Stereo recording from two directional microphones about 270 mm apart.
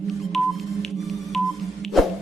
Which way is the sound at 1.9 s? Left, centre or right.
Centre.